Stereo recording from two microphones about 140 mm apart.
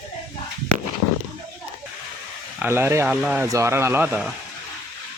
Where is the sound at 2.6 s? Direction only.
15° right (ahead or behind).